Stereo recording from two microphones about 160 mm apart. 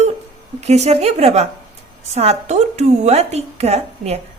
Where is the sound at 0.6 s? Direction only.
45° right (ahead or behind).